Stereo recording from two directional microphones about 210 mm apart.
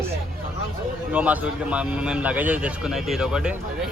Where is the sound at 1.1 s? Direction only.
5° right (ahead or behind).